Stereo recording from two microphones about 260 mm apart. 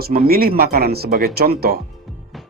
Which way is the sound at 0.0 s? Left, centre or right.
Right.